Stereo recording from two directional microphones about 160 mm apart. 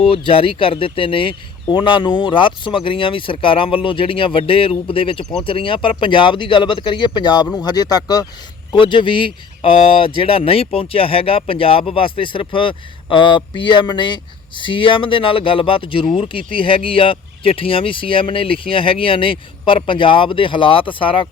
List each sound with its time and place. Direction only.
0.0 s speech: 35° left (ahead or behind)